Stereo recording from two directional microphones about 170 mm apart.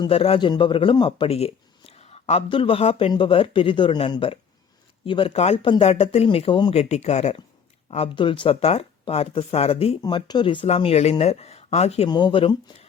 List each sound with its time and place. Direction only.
0.0 s speech: 35° left (ahead or behind)